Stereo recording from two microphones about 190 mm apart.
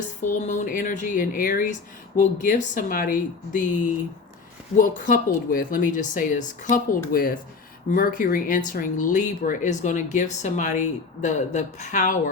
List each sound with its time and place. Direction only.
0.3 s speech: 40° left (ahead or behind)
4.8 s speech: 45° left (ahead or behind)